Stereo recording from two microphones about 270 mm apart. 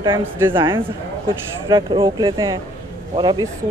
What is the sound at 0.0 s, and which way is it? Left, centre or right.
Speech, centre.